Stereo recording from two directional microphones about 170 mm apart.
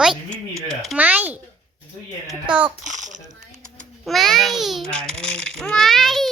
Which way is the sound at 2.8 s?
45° right (ahead or behind).